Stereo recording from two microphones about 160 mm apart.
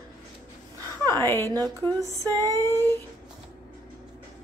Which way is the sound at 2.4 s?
15° left (ahead or behind).